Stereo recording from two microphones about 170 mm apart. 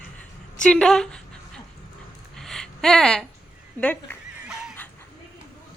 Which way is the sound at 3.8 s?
10° left (ahead or behind).